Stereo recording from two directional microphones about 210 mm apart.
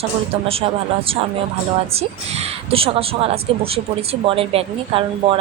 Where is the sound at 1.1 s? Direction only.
25° right (ahead or behind).